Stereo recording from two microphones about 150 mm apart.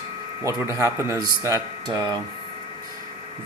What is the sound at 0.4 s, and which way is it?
A man's voice, 20° right (ahead or behind).